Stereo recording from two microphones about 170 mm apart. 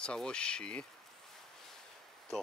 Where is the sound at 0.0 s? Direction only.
5° left (ahead or behind).